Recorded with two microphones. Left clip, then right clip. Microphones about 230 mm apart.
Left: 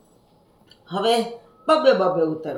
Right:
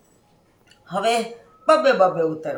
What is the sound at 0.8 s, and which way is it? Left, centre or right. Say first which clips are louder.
Speech: even; right.